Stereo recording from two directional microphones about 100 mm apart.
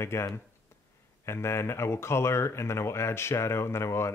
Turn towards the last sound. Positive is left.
turn(degrees=25)  # may be behind; listen again after turning